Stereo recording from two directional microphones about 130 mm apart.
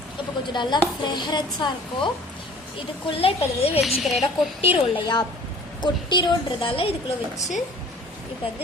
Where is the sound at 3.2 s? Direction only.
50° left (ahead or behind).